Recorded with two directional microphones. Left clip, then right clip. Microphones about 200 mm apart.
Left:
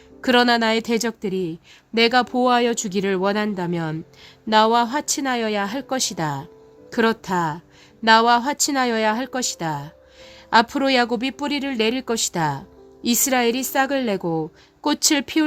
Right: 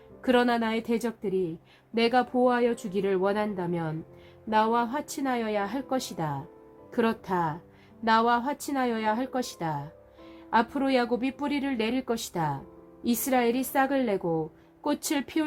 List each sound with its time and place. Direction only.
0.2 s a woman's voice: 45° left (ahead or behind)
4.4 s a woman's voice: 50° left (ahead or behind)